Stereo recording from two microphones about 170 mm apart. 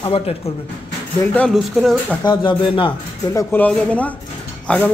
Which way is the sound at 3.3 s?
10° left (ahead or behind).